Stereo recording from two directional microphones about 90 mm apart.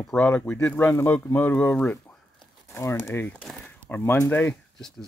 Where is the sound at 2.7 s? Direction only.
30° left (ahead or behind).